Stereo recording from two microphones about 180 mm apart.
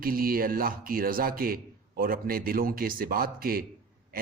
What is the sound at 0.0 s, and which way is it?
Speech, 55° right (ahead or behind).